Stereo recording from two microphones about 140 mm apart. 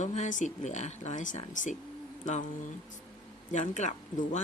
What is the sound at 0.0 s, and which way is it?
Speech, 55° left (ahead or behind).